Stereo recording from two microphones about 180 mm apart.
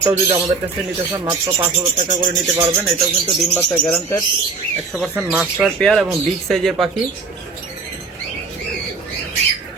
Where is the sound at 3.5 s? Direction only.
10° left (ahead or behind).